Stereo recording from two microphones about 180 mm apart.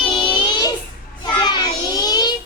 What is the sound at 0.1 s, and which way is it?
Child singing, 25° left (ahead or behind).